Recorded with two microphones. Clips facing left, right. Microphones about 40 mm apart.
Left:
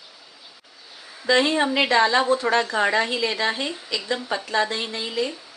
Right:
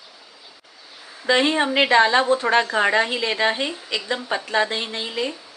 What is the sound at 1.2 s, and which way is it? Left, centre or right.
Speech, right.